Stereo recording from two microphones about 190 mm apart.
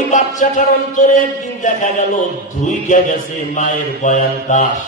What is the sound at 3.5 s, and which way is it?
A man's voice, 40° left (ahead or behind).